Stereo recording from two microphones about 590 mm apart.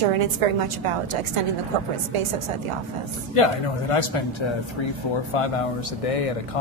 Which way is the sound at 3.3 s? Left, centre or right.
Left.